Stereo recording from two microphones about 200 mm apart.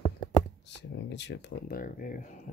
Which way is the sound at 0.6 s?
60° left (ahead or behind).